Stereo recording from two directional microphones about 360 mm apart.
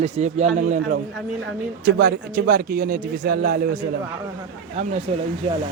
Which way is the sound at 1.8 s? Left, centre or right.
Right.